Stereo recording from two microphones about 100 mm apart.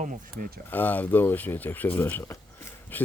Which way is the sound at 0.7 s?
20° left (ahead or behind).